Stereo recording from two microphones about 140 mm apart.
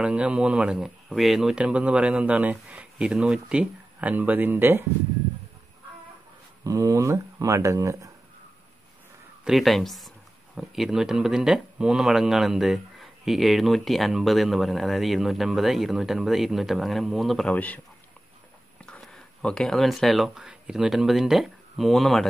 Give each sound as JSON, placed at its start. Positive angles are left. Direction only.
{"t": 0.0, "sound": "speech", "side_deg": -10}
{"t": 6.6, "sound": "speech", "side_deg": -25}
{"t": 9.4, "sound": "speech", "side_deg": 0}
{"t": 18.9, "sound": "speech", "side_deg": 5}